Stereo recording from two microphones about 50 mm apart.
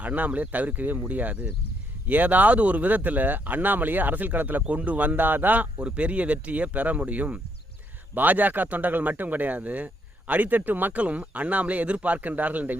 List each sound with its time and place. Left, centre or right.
0.0 s speech: right
5.8 s speech: right